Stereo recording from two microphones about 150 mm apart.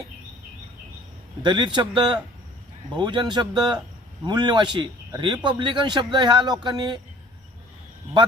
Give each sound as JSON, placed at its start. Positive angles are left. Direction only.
{"t": 1.4, "sound": "a man's voice", "side_deg": -30}